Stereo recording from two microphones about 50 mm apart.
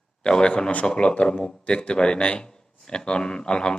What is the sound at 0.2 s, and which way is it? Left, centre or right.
Speech, centre.